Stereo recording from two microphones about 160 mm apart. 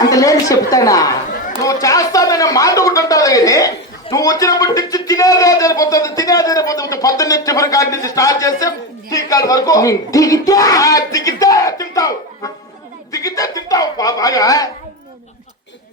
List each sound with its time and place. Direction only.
0.0 s a man's voice: 20° left (ahead or behind)